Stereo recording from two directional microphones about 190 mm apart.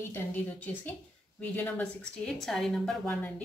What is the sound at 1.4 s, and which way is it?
A woman's voice, 10° left (ahead or behind).